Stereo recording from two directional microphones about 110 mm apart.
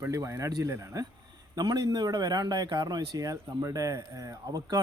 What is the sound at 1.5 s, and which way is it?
A man's voice, 40° right (ahead or behind).